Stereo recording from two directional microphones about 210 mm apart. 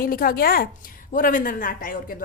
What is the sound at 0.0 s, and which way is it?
A woman's voice, 45° left (ahead or behind).